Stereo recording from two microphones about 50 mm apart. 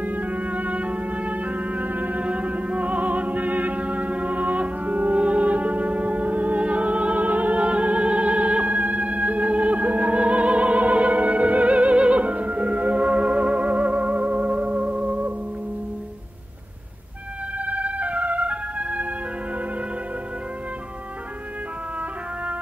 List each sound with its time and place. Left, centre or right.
0.0 s music: right
17.6 s music: right